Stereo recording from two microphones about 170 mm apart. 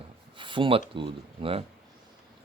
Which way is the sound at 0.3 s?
30° right (ahead or behind).